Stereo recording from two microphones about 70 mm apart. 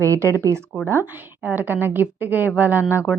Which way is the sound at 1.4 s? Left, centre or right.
Right.